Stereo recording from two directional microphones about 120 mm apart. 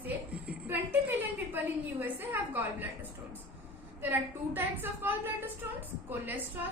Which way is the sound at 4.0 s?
15° right (ahead or behind).